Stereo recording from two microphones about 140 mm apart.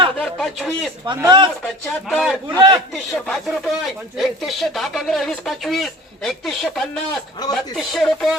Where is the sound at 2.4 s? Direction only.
30° right (ahead or behind).